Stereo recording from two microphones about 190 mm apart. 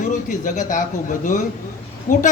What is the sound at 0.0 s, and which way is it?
A man's voice, 40° left (ahead or behind).